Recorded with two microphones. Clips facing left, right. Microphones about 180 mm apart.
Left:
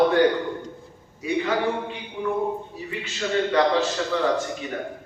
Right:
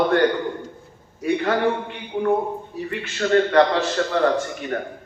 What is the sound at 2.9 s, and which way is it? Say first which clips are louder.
A man's voice: right 6 dB; 60° right (ahead or behind).